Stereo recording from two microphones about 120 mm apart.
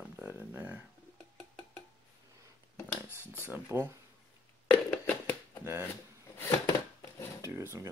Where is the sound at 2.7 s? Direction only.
20° left (ahead or behind).